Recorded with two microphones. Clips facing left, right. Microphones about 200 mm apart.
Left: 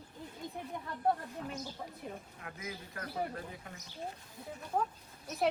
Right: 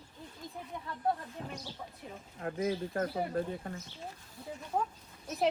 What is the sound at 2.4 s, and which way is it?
Speech, 40° right (ahead or behind).